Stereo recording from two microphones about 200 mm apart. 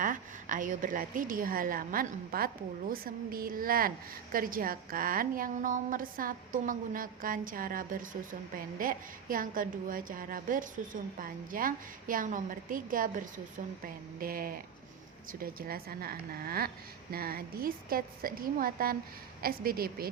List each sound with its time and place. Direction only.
0.0 s a woman's voice: 40° right (ahead or behind)